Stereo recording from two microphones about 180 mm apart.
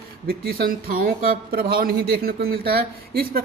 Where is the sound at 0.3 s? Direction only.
55° right (ahead or behind).